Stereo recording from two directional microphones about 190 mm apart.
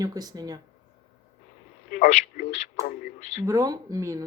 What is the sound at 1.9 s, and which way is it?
Speech, 40° left (ahead or behind).